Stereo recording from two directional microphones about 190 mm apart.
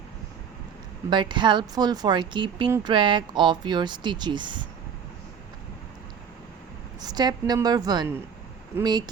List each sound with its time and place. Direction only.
1.1 s speech: 25° right (ahead or behind)
7.0 s speech: 20° right (ahead or behind)